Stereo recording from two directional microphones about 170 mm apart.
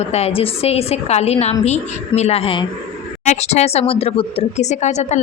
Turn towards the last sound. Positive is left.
turn(degrees=40)  # may be behind; listen again after turning